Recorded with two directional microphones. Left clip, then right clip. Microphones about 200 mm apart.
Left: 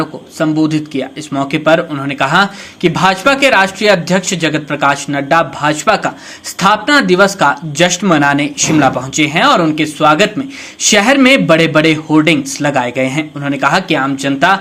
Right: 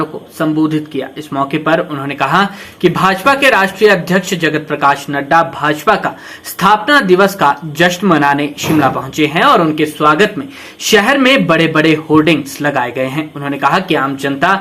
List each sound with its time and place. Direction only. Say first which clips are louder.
0.0 s speech: left 1 dB; 25° left (ahead or behind)